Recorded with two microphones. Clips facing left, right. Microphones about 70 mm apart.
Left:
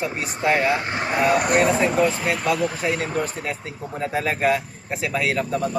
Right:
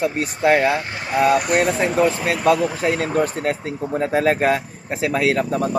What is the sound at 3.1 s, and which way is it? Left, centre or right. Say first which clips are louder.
Speech: right 6 dB; right.